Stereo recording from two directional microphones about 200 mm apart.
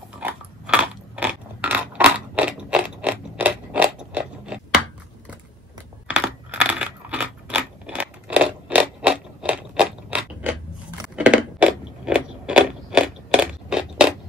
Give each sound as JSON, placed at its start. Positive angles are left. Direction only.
{"t": 0.2, "sound": "biting", "side_deg": -5}
{"t": 6.0, "sound": "coin", "side_deg": -5}
{"t": 11.1, "sound": "biting", "side_deg": -5}